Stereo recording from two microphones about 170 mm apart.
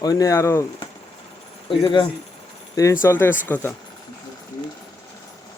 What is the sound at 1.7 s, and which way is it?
Speech, 25° left (ahead or behind).